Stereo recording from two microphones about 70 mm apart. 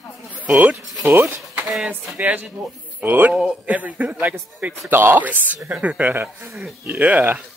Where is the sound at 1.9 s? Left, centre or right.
Right.